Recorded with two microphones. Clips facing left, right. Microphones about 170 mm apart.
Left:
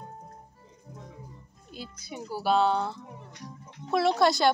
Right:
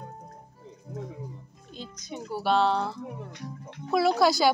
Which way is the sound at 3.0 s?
65° right (ahead or behind).